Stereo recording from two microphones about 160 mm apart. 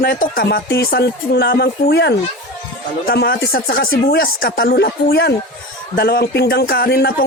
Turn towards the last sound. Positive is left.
turn(degrees=90)